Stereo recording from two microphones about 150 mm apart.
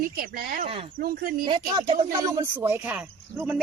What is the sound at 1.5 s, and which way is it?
Speech, 35° right (ahead or behind).